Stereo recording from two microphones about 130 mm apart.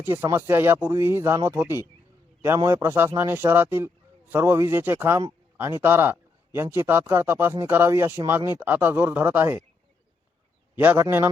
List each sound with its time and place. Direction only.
0.0 s speech: 20° right (ahead or behind)
10.8 s a man's voice: 15° right (ahead or behind)